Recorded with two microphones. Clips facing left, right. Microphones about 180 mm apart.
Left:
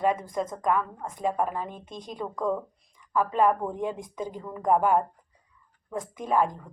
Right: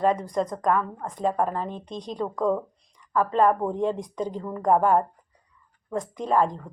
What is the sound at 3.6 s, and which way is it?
Speech, 30° right (ahead or behind).